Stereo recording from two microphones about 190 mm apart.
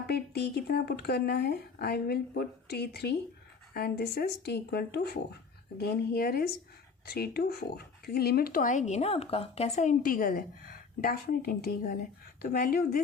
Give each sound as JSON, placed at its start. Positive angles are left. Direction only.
{"t": 0.1, "sound": "speech", "side_deg": 55}